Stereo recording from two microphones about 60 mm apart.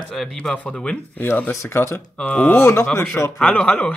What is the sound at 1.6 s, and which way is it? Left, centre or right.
Speech, left.